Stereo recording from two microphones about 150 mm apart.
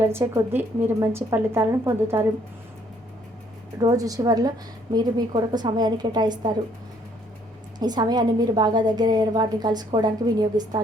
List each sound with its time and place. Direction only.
0.0 s a woman's voice: 15° right (ahead or behind)
3.8 s a woman's voice: 25° right (ahead or behind)
7.8 s a woman's voice: 25° right (ahead or behind)